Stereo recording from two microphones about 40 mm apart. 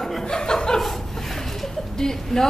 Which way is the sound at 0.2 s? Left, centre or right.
Centre.